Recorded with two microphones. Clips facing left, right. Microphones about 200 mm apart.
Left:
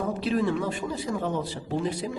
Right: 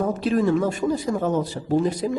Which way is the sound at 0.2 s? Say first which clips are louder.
Right 5 dB; 45° right (ahead or behind).